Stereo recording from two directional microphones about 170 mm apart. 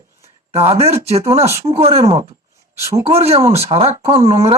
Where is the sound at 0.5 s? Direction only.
35° right (ahead or behind).